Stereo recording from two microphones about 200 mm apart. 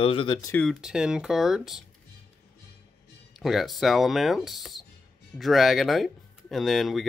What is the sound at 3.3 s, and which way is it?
Speech, centre (ahead or behind).